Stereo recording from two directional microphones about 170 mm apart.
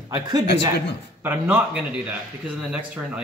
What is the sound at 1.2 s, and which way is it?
A man's voice, 10° right (ahead or behind).